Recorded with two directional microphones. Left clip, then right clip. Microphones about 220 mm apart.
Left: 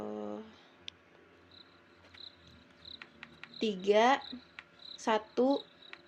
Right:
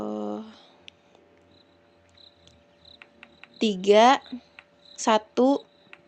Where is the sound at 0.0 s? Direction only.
35° right (ahead or behind).